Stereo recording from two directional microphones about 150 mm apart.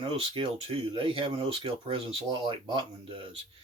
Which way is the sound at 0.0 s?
35° right (ahead or behind).